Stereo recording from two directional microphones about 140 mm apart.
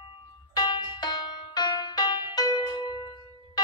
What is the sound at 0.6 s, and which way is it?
Music, 30° left (ahead or behind).